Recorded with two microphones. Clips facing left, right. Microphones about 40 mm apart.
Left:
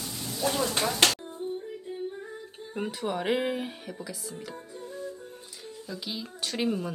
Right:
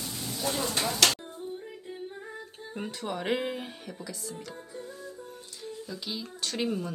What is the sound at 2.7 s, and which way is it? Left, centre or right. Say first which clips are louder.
Speech: left 4 dB; centre.